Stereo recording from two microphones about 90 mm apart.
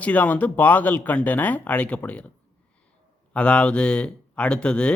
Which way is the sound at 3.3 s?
10° left (ahead or behind).